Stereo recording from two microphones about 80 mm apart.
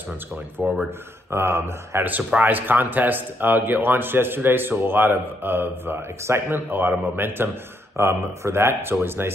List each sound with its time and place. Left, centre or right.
0.6 s speech: right
1.3 s speech: right
2.0 s speech: right